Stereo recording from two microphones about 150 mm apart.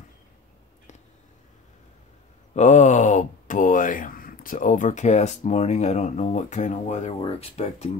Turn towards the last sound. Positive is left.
turn(degrees=45)  # may be behind; listen again after turning